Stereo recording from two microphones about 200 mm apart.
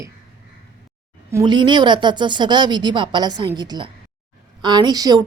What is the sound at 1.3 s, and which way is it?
A woman's voice, 25° right (ahead or behind).